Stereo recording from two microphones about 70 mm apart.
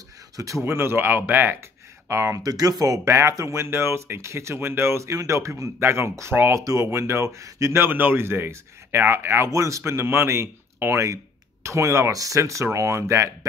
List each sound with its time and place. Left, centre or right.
0.7 s speech: right
2.0 s speech: right
2.5 s speech: right
6.5 s speech: right
7.8 s speech: right